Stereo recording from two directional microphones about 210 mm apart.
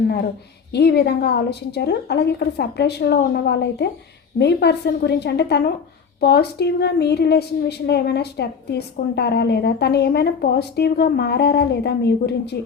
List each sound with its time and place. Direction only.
0.7 s a woman's voice: 50° left (ahead or behind)